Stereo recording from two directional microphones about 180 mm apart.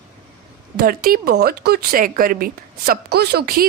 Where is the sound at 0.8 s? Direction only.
55° right (ahead or behind).